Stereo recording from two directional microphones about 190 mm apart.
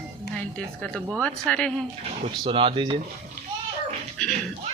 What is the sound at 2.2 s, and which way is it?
Speech, 25° right (ahead or behind).